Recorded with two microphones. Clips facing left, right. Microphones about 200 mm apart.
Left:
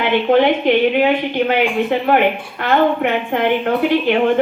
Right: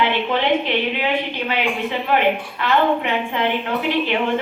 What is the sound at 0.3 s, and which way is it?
A woman's voice, 50° left (ahead or behind).